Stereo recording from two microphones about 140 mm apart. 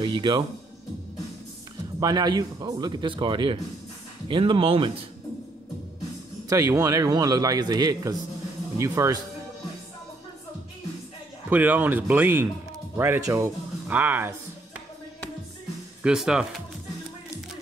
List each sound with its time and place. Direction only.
0.0 s music: 35° right (ahead or behind)
2.0 s speech: 30° right (ahead or behind)
6.5 s a man's voice: 25° right (ahead or behind)
11.5 s a man's voice: 15° right (ahead or behind)
16.0 s speech: 5° right (ahead or behind)